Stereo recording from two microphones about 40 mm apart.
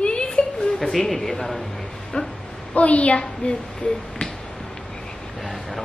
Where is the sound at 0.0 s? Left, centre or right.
Left.